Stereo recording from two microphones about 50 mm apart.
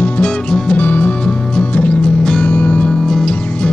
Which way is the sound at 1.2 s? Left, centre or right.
Centre.